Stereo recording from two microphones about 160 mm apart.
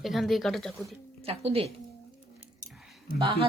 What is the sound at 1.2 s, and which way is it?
Speech, 40° right (ahead or behind).